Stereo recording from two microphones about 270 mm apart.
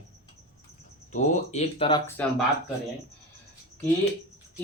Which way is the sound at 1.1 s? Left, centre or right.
Left.